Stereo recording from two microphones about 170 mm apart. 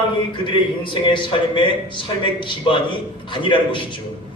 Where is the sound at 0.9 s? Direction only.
30° left (ahead or behind).